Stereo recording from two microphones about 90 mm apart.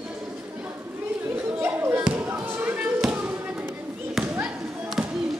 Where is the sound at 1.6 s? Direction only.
25° right (ahead or behind).